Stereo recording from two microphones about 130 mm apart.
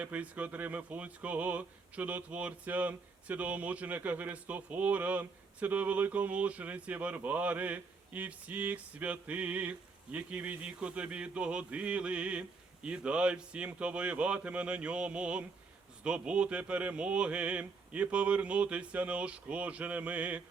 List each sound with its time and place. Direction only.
0.0 s speech: 10° right (ahead or behind)